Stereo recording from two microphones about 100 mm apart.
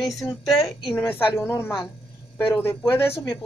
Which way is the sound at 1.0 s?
20° left (ahead or behind).